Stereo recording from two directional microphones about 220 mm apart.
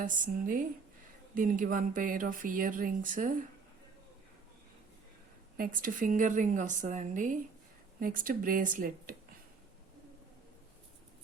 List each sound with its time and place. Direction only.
0.0 s speech: 35° right (ahead or behind)
5.5 s speech: 40° right (ahead or behind)